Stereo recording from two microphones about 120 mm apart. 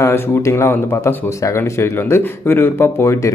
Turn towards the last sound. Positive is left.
turn(degrees=25)  # may be behind; listen again after turning